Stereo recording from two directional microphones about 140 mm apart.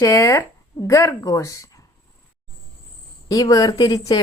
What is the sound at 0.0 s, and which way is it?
Speech, 20° left (ahead or behind).